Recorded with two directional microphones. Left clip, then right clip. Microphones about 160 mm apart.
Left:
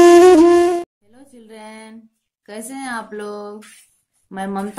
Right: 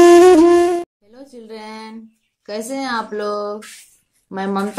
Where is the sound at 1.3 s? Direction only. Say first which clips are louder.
Right 5 dB; 45° left (ahead or behind).